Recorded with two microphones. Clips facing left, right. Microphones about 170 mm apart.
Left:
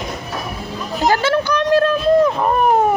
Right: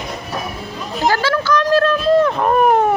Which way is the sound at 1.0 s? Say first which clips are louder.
Left 1 dB; 20° left (ahead or behind).